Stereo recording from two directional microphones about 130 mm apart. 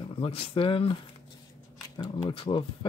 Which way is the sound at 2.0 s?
30° left (ahead or behind).